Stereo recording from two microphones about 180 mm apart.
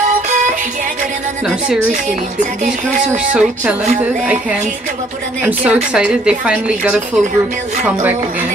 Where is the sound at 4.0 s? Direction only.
10° right (ahead or behind).